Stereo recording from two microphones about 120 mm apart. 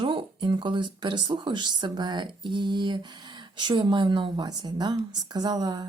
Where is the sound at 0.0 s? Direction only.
40° right (ahead or behind).